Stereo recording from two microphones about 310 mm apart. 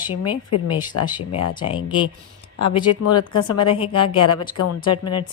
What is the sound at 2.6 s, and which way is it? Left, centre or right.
Speech, left.